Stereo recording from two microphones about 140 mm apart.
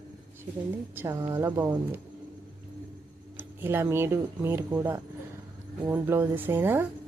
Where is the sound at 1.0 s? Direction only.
20° right (ahead or behind).